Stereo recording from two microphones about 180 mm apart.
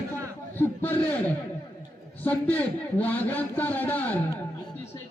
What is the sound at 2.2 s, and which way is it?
A man's voice, 10° left (ahead or behind).